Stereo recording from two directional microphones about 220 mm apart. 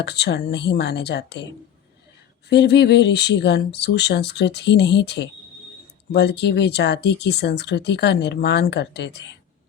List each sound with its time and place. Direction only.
0.0 s speech: 50° left (ahead or behind)
2.5 s speech: 50° left (ahead or behind)